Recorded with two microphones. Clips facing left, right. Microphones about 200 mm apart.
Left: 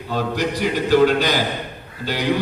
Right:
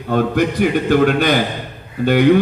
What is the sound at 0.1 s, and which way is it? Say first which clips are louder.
A man's voice: right 6 dB; 55° right (ahead or behind).